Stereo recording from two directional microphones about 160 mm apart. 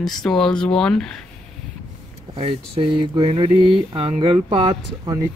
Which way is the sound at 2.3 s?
35° right (ahead or behind).